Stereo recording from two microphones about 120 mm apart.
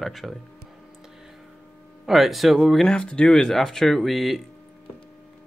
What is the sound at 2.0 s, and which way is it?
Speech, centre (ahead or behind).